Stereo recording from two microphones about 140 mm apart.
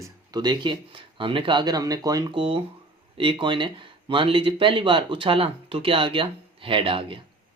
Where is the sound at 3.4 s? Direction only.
35° right (ahead or behind).